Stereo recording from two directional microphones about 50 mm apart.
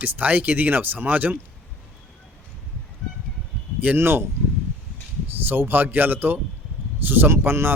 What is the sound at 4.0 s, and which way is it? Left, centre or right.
Speech, right.